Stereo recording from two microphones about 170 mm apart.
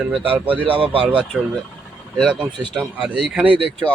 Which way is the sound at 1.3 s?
10° right (ahead or behind).